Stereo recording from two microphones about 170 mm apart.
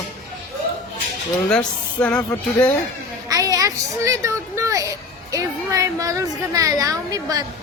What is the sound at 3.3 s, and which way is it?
A child's voice, 20° right (ahead or behind).